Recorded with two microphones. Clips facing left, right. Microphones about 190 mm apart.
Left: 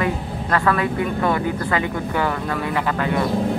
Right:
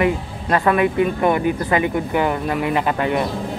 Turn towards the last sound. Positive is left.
turn(degrees=-20)  # may be behind; listen again after turning